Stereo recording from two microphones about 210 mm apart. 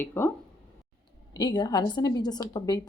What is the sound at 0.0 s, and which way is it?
Speech, 10° left (ahead or behind).